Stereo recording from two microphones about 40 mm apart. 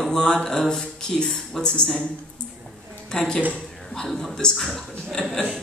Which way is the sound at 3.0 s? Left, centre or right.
Centre.